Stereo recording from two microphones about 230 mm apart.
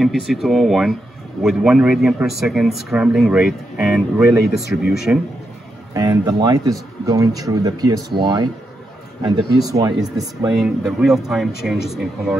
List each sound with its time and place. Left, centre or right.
0.0 s speech: centre
10.5 s speech: centre